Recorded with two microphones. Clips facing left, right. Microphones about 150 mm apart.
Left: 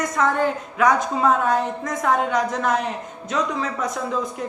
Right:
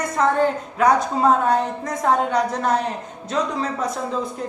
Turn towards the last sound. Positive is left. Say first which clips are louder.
# right 1 dB
turn(degrees=-30)  # may be behind; listen again after turning